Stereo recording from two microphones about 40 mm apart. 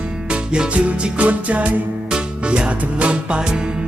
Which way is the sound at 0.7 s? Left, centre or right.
Right.